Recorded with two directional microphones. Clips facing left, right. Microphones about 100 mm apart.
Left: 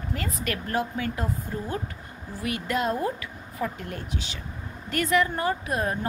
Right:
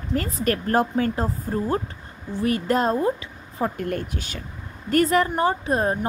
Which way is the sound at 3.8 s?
55° right (ahead or behind).